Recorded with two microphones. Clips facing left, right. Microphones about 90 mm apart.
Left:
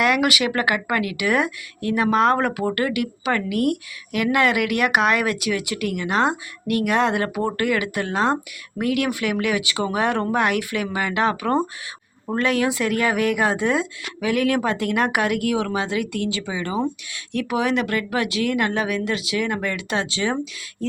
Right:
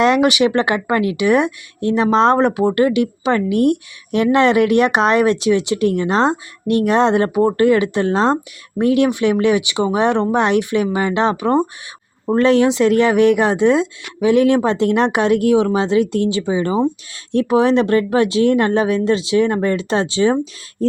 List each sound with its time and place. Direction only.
0.0 s speech: 25° right (ahead or behind)